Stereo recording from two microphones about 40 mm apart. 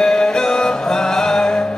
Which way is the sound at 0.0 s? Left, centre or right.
Centre.